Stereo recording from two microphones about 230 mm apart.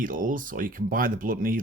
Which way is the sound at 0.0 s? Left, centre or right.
Right.